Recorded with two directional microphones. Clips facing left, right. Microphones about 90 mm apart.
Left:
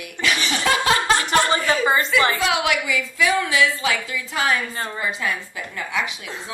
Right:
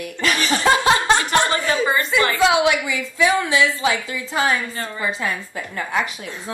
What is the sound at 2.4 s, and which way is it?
A woman's voice, 25° right (ahead or behind).